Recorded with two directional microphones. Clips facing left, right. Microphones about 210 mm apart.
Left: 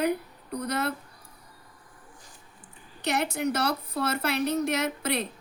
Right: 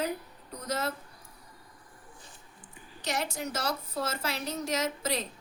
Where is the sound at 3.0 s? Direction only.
65° left (ahead or behind).